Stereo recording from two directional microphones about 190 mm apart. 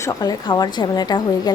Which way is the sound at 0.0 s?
20° left (ahead or behind).